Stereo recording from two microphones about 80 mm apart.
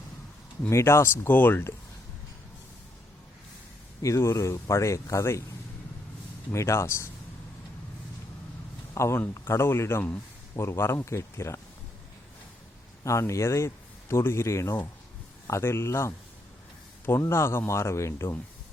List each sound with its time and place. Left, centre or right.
0.7 s speech: left
4.0 s speech: left
6.5 s speech: left
9.0 s speech: left
13.1 s speech: left